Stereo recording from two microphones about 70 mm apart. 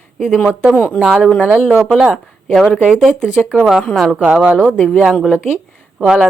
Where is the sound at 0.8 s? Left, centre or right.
Centre.